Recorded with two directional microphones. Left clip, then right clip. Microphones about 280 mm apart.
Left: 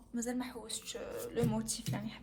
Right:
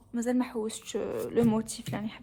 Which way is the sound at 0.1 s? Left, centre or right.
Right.